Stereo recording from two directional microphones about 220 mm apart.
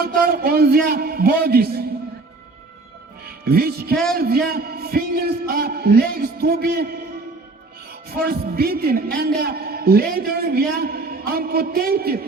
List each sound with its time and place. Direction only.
0.0 s a man's voice: 40° right (ahead or behind)
3.2 s speech: 45° right (ahead or behind)
3.9 s a man's voice: centre (ahead or behind)
4.2 s a man's voice: 45° right (ahead or behind)
8.1 s a man's voice: 45° right (ahead or behind)